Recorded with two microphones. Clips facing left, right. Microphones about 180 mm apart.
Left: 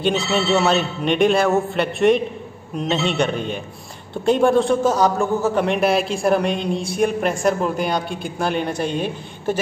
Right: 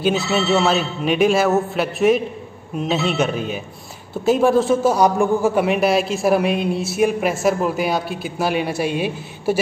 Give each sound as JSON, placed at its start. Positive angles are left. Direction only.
{"t": 0.5, "sound": "a man's voice", "side_deg": 0}